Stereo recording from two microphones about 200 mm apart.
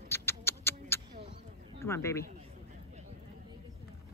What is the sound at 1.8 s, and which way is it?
Speech, 15° left (ahead or behind).